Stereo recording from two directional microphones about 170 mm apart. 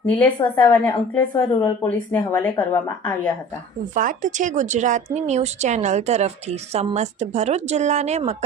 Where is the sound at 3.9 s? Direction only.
50° right (ahead or behind).